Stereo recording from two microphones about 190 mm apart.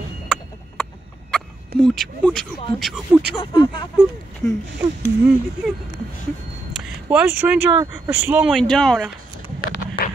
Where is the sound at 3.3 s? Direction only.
25° left (ahead or behind).